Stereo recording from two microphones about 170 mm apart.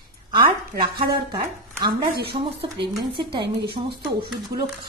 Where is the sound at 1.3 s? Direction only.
25° right (ahead or behind).